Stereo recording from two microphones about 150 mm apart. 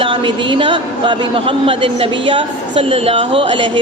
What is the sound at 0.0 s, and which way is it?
A man's voice, 35° right (ahead or behind).